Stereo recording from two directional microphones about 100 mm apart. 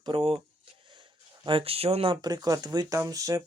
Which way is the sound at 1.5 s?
70° right (ahead or behind).